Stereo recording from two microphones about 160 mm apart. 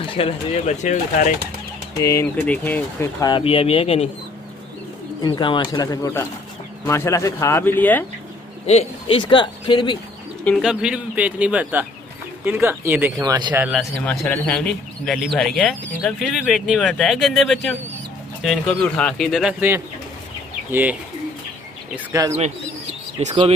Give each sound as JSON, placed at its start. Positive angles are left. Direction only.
{"t": 0.0, "sound": "speech", "side_deg": 35}
{"t": 2.0, "sound": "speech", "side_deg": 20}
{"t": 5.2, "sound": "speech", "side_deg": 30}
{"t": 8.6, "sound": "speech", "side_deg": 40}
{"t": 10.4, "sound": "a man's voice", "side_deg": 0}
{"t": 13.2, "sound": "speech", "side_deg": -25}
{"t": 13.5, "sound": "a man's voice", "side_deg": -5}
{"t": 14.0, "sound": "speech", "side_deg": 5}
{"t": 21.9, "sound": "speech", "side_deg": -20}
{"t": 23.2, "sound": "speech", "side_deg": -40}